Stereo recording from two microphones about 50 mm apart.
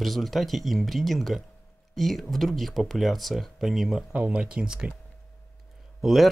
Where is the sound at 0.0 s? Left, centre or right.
Centre.